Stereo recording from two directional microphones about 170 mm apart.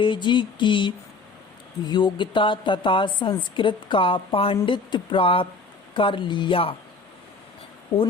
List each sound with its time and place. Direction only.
0.0 s a woman's voice: 30° left (ahead or behind)